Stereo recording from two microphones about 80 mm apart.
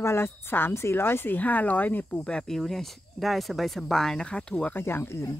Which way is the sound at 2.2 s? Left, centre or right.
Centre.